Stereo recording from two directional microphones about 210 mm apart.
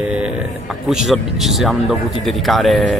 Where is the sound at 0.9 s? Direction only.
Centre (ahead or behind).